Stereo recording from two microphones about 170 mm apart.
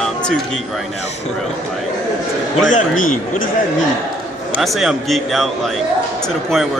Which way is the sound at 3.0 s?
50° left (ahead or behind).